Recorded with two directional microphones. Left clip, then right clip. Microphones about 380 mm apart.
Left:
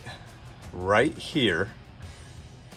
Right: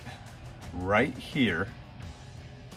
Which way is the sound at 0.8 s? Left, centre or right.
Centre.